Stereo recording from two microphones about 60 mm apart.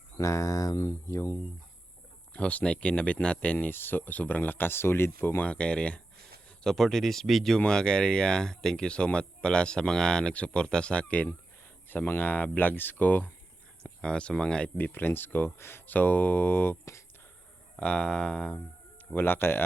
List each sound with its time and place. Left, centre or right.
0.2 s speech: left
2.3 s speech: left
3.7 s speech: left
5.4 s speech: left
6.7 s speech: centre
7.6 s speech: centre
13.8 s speech: centre
14.8 s speech: left
17.7 s speech: centre
19.1 s speech: left